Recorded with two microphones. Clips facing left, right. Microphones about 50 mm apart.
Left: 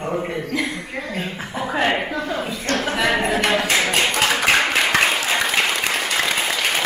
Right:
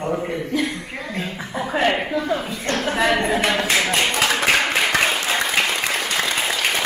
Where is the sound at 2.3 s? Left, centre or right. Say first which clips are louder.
Left 1 dB; centre.